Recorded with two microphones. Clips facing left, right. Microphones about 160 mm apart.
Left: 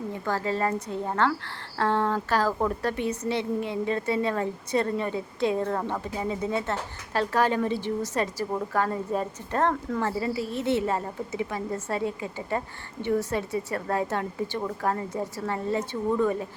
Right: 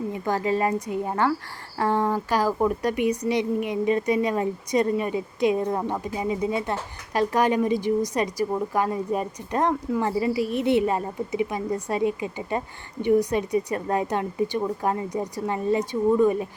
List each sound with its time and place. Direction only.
0.1 s a woman's voice: 15° right (ahead or behind)